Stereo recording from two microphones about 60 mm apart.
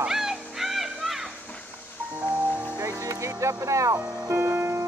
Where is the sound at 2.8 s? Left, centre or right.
Right.